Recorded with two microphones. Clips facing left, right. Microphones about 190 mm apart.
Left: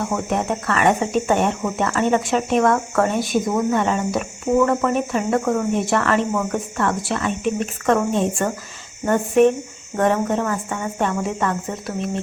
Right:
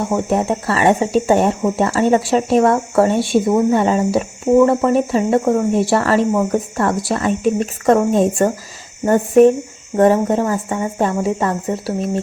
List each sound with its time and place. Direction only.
0.1 s speech: 30° right (ahead or behind)